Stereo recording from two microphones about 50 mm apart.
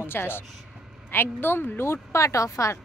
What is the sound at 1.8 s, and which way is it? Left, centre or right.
Speech, left.